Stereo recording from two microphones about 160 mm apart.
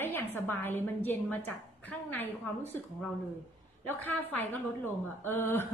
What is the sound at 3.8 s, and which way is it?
A woman's voice, 10° left (ahead or behind).